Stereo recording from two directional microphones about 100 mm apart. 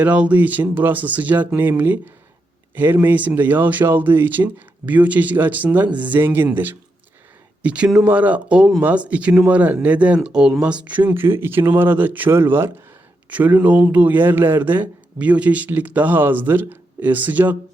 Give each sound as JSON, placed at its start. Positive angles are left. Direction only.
{"t": 0.0, "sound": "speech", "side_deg": -15}